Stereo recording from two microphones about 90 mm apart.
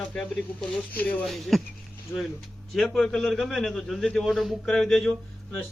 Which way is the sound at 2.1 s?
30° left (ahead or behind).